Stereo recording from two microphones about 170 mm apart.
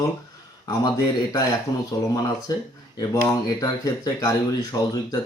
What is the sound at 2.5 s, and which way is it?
Speech, 20° left (ahead or behind).